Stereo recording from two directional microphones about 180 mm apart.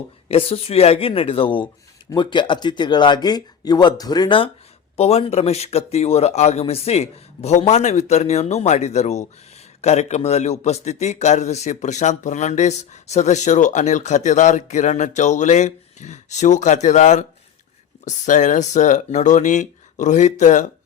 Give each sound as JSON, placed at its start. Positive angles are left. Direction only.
{"t": 0.3, "sound": "speech", "side_deg": 30}
{"t": 4.9, "sound": "speech", "side_deg": 35}